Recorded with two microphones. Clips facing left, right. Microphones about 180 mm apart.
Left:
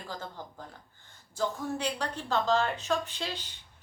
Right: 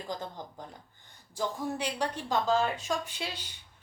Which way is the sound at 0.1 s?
15° right (ahead or behind).